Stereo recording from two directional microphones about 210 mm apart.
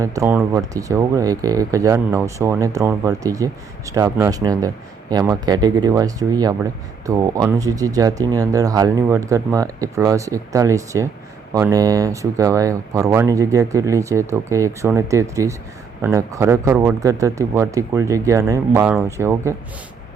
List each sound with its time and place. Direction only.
0.0 s speech: 15° right (ahead or behind)